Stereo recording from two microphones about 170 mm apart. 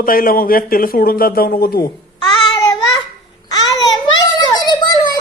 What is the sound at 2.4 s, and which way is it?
Child singing, 25° left (ahead or behind).